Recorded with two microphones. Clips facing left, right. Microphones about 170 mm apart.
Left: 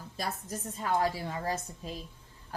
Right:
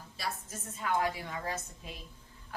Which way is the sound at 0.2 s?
35° left (ahead or behind).